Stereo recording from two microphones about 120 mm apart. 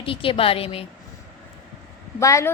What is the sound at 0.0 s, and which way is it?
Speech, 50° left (ahead or behind).